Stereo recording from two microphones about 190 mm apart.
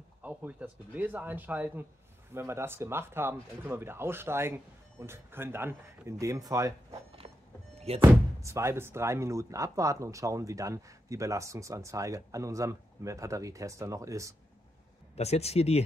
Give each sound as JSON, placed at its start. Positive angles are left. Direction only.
{"t": 0.2, "sound": "speech", "side_deg": -10}
{"t": 8.0, "sound": "speech", "side_deg": -15}
{"t": 15.1, "sound": "speech", "side_deg": 35}